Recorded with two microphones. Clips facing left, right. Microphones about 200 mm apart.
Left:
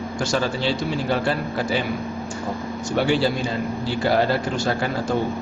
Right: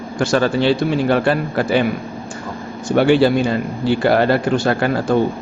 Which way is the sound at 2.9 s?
60° right (ahead or behind).